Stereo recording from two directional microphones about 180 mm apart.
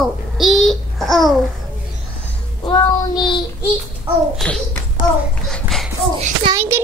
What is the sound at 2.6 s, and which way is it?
Child singing, 25° left (ahead or behind).